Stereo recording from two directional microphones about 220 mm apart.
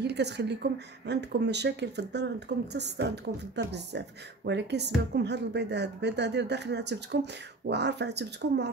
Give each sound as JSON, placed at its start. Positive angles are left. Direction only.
{"t": 0.0, "sound": "a woman's voice", "side_deg": -50}